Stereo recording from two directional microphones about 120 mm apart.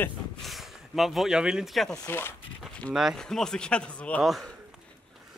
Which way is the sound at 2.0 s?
20° left (ahead or behind).